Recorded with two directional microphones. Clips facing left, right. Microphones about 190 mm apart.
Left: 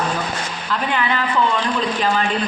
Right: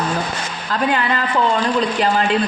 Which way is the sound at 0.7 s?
40° right (ahead or behind).